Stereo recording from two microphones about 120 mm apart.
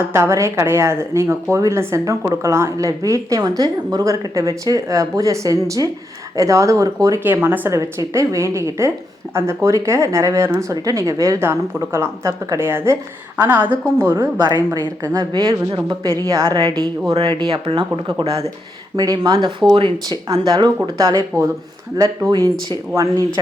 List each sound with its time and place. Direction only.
0.0 s speech: 25° right (ahead or behind)
7.3 s speech: 15° right (ahead or behind)
14.4 s speech: 35° right (ahead or behind)
16.2 s speech: 25° right (ahead or behind)
16.5 s speech: 40° right (ahead or behind)
18.9 s speech: 35° right (ahead or behind)